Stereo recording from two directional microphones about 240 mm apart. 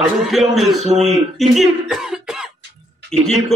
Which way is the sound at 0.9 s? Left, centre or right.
Right.